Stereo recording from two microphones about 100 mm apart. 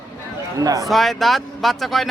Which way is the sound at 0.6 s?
35° right (ahead or behind).